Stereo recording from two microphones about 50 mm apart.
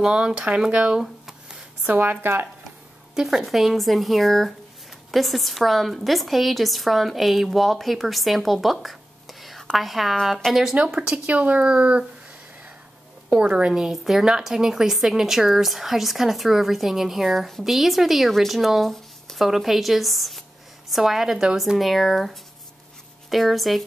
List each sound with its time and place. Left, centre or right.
0.0 s a woman's voice: centre
1.0 s a sound: centre
1.9 s speech: right
3.2 s a woman's voice: centre
10.4 s speech: centre
11.2 s speech: right
13.3 s a woman's voice: right
21.7 s a woman's voice: centre